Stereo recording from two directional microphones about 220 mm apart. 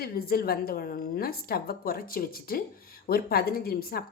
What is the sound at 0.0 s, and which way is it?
A woman's voice, 45° left (ahead or behind).